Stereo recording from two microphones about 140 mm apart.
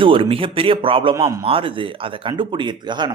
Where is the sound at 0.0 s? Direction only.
40° right (ahead or behind).